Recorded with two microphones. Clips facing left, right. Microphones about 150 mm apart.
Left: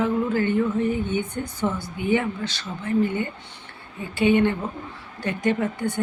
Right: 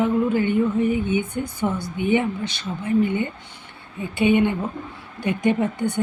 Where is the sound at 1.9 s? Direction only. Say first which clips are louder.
Right 3 dB; 20° right (ahead or behind).